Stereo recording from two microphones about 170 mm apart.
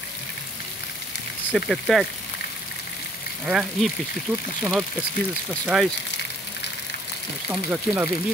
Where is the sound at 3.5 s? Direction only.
Centre (ahead or behind).